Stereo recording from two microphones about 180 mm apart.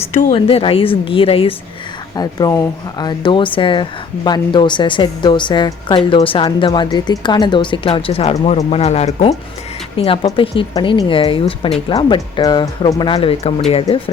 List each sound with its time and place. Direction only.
0.1 s speech: 45° left (ahead or behind)
0.3 s a woman's voice: 30° left (ahead or behind)